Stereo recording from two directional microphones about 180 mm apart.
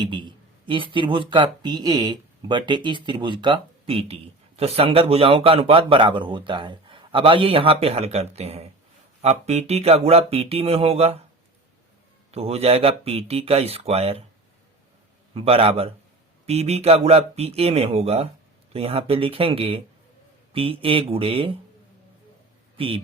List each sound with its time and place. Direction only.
0.0 s a man's voice: 25° right (ahead or behind)
12.3 s speech: 35° right (ahead or behind)
15.4 s speech: 30° right (ahead or behind)
22.8 s speech: 30° right (ahead or behind)